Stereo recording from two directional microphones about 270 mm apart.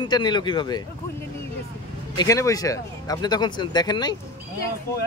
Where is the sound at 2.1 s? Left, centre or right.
Centre.